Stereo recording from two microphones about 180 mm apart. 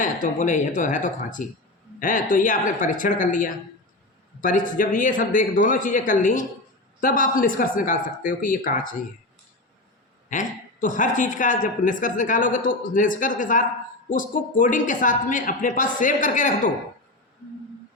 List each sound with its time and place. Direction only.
0.0 s a woman's voice: 45° left (ahead or behind)
10.2 s a woman's voice: 45° left (ahead or behind)